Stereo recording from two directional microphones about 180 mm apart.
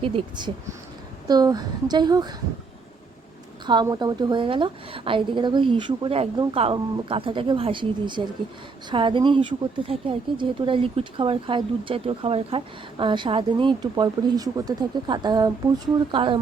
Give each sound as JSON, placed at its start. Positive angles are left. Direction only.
{"t": 0.0, "sound": "speech", "side_deg": -25}
{"t": 3.7, "sound": "speech", "side_deg": -25}